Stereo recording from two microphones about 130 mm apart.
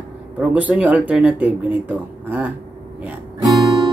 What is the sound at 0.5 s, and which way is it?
Speech, 10° right (ahead or behind).